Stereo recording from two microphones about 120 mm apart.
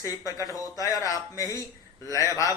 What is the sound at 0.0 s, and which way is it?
A man's voice, 30° left (ahead or behind).